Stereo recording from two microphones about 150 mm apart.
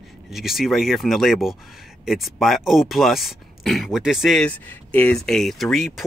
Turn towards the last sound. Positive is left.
turn(degrees=0)  # may be behind; listen again after turning